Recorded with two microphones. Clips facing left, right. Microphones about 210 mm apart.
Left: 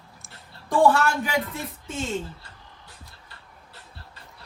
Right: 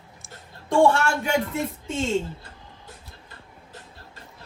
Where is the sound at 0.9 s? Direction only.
25° right (ahead or behind).